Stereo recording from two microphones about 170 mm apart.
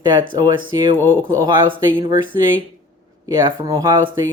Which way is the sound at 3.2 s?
20° right (ahead or behind).